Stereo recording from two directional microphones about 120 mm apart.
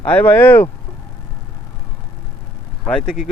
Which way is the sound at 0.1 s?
15° left (ahead or behind).